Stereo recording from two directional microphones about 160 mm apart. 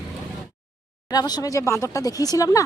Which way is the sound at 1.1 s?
25° left (ahead or behind).